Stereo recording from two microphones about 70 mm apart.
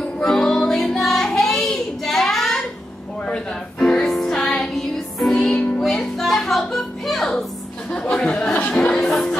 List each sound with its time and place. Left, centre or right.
0.0 s music: centre
3.8 s music: centre
8.3 s a sound: centre
8.7 s music: centre